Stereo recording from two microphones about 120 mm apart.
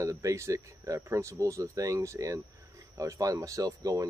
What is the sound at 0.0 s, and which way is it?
Speech, 25° right (ahead or behind).